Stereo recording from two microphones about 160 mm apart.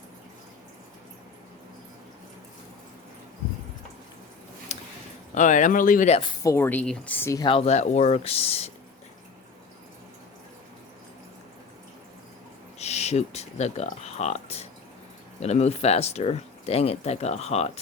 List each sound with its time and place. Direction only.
5.3 s speech: 50° left (ahead or behind)
6.4 s speech: 15° left (ahead or behind)
7.4 s speech: 35° left (ahead or behind)
12.8 s speech: 45° left (ahead or behind)